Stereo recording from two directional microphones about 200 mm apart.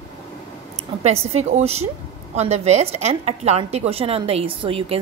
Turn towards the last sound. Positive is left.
turn(degrees=-25)  # may be behind; listen again after turning